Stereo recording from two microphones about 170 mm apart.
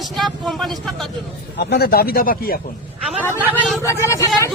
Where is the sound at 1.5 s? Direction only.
70° left (ahead or behind).